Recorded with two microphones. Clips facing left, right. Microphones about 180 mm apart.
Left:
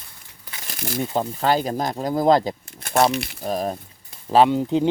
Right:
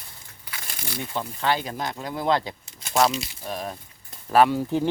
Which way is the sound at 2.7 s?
55° left (ahead or behind).